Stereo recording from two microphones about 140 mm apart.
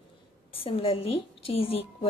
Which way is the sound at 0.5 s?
40° left (ahead or behind).